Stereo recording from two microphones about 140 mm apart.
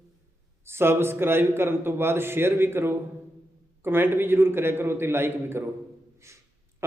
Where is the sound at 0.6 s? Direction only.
15° right (ahead or behind).